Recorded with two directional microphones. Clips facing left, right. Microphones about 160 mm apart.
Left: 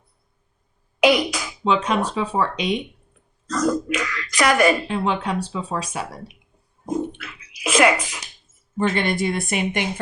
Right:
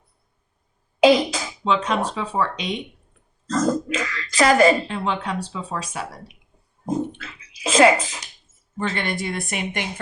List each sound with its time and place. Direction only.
1.0 s a sound: 30° right (ahead or behind)
1.6 s speech: 10° left (ahead or behind)
3.4 s speech: 25° right (ahead or behind)
4.9 s speech: 10° left (ahead or behind)
6.8 s speech: 25° right (ahead or behind)
9.0 s a woman's voice: 20° left (ahead or behind)